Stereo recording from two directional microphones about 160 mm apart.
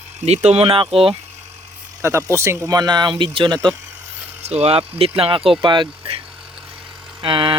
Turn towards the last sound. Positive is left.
turn(degrees=-30)  # may be behind; listen again after turning